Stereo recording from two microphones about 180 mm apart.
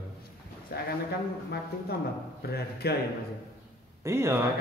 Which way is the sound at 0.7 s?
60° left (ahead or behind).